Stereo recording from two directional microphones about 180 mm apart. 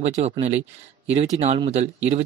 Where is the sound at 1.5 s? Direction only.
35° right (ahead or behind).